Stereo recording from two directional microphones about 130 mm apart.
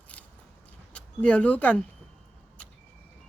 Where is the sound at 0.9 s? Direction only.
10° left (ahead or behind).